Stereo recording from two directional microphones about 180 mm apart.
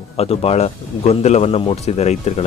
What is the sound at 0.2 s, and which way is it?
Speech, 35° left (ahead or behind).